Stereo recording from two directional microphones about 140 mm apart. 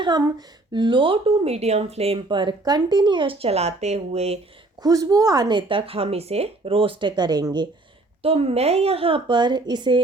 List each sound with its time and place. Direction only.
0.0 s speech: 30° right (ahead or behind); by 4.4 s 50° right (ahead or behind)
4.8 s speech: 25° right (ahead or behind)
8.2 s speech: 45° right (ahead or behind)